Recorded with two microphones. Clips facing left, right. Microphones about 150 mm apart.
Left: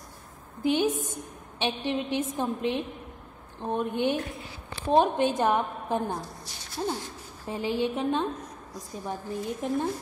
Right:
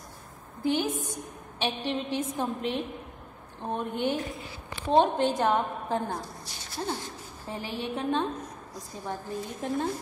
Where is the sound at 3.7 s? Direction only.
15° left (ahead or behind).